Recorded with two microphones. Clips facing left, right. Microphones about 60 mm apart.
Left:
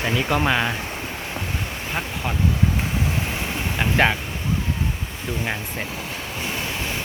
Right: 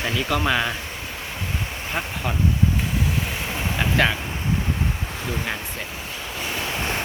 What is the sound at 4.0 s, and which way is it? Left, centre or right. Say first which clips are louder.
Speech: left 2 dB; left.